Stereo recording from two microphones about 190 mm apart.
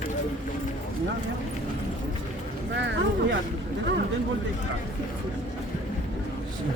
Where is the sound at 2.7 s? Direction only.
70° right (ahead or behind).